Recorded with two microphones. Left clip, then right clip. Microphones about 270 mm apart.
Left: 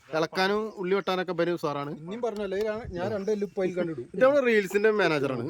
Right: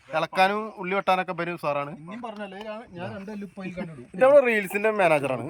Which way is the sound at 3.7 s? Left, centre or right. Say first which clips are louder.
Right 4 dB; centre.